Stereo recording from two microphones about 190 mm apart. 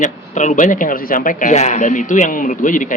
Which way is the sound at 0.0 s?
40° left (ahead or behind).